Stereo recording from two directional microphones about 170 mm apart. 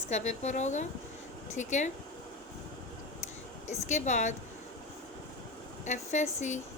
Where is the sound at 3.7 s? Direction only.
45° left (ahead or behind).